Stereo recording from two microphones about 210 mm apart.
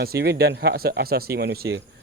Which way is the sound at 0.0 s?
50° right (ahead or behind).